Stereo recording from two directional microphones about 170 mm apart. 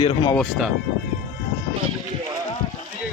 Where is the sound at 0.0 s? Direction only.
25° left (ahead or behind).